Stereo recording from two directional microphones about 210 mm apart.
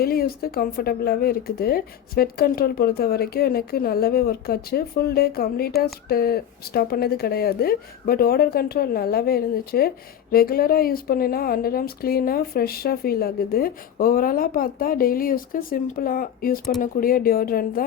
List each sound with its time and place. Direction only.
0.0 s speech: 45° left (ahead or behind)